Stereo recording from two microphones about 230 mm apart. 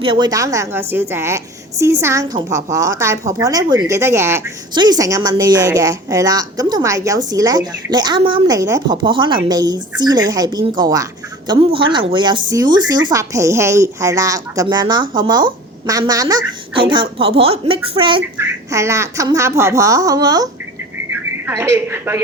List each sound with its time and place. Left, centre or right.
0.0 s speech: centre